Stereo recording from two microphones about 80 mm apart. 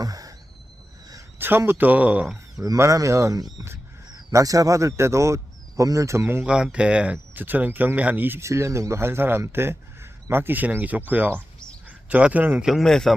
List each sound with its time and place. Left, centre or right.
0.0 s wheeze: right
1.4 s speech: right
2.6 s speech: right
6.4 s speech: centre
8.4 s speech: right
12.6 s speech: centre